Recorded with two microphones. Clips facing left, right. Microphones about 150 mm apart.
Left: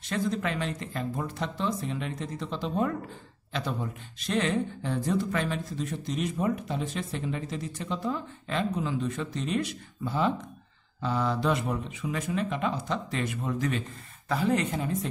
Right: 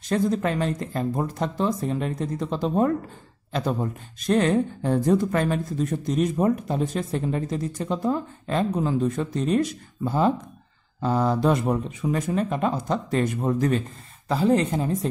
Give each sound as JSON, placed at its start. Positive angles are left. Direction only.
{"t": 0.1, "sound": "speech", "side_deg": -40}